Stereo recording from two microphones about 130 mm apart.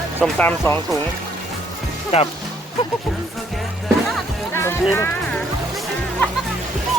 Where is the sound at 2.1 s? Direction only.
55° left (ahead or behind).